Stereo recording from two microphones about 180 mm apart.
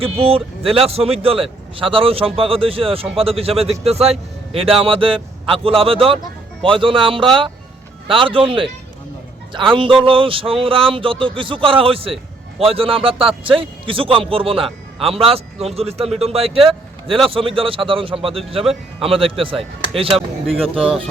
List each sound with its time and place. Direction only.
0.0 s speech: 30° right (ahead or behind)